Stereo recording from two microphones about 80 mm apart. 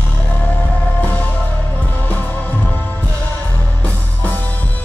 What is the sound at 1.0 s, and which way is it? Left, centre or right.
Music, centre.